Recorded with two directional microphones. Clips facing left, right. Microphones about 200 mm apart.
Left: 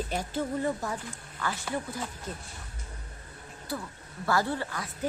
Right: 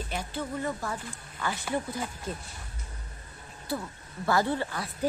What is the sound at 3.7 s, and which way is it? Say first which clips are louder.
Speech: right 3 dB; 25° right (ahead or behind).